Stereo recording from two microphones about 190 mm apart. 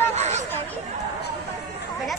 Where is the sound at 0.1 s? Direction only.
35° right (ahead or behind).